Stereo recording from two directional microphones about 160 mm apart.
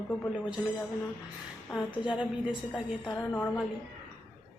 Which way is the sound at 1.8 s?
10° right (ahead or behind).